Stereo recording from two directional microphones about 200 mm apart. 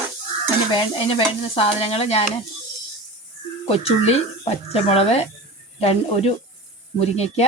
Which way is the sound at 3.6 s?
30° left (ahead or behind).